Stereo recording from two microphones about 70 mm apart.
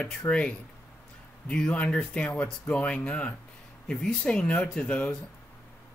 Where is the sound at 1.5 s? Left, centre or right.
Centre.